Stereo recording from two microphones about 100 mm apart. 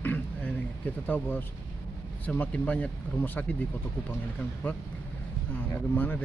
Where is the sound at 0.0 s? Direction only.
20° left (ahead or behind).